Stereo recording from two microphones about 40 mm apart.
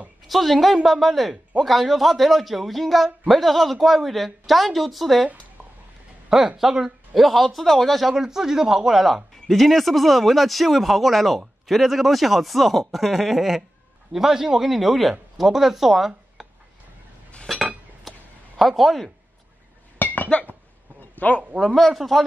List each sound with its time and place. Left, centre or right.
0.3 s speech: centre
6.2 s speech: centre
7.2 s speech: centre
8.1 s speech: centre
17.5 s cutlery: centre
18.1 s a sound: centre
18.6 s speech: centre
20.0 s chink: left
21.0 s a sound: left
21.7 s speech: centre